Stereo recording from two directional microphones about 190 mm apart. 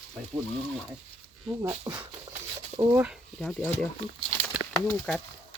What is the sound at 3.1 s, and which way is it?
Speech, centre (ahead or behind).